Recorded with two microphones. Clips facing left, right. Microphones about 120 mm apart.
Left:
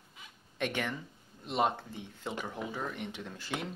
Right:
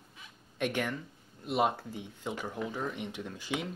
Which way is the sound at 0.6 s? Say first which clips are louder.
Right 2 dB; 10° right (ahead or behind).